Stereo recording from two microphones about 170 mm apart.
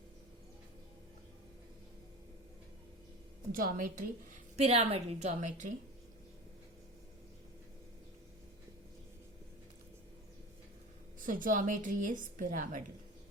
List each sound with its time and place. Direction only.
3.5 s a woman's voice: 55° right (ahead or behind)
4.5 s a woman's voice: 40° right (ahead or behind)
11.2 s a woman's voice: 50° right (ahead or behind)